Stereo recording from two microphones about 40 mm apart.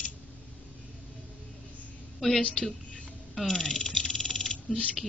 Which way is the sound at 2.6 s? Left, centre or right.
Centre.